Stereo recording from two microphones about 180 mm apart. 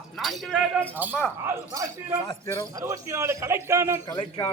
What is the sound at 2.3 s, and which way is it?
Speech, 25° left (ahead or behind).